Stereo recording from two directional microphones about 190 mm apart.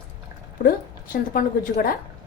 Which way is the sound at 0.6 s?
50° left (ahead or behind).